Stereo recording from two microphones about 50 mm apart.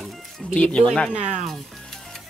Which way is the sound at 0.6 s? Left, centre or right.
Left.